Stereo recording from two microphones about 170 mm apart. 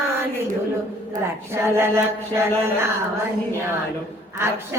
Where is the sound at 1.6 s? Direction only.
15° right (ahead or behind).